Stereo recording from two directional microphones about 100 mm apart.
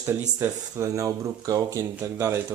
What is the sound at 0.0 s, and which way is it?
Speech, 25° right (ahead or behind).